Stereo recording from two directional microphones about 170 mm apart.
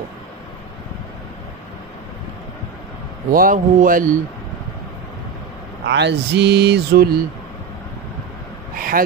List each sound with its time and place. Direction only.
3.3 s speech: 55° right (ahead or behind)
5.9 s speech: 90° right; by 7.2 s 65° right (ahead or behind)
8.7 s a sound: 55° right (ahead or behind)